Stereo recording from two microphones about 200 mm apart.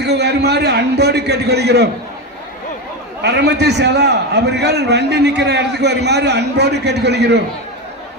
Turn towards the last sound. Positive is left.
turn(degrees=-55)  # may be behind; listen again after turning